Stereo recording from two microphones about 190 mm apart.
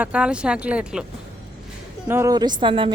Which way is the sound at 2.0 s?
15° right (ahead or behind).